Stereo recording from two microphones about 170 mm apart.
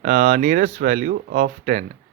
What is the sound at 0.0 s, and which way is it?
Speech, 45° right (ahead or behind).